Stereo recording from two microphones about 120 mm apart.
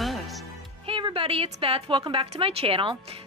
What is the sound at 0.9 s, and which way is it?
A woman's voice, 45° right (ahead or behind).